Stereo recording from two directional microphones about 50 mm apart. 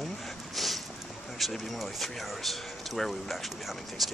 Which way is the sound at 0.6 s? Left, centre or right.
Centre.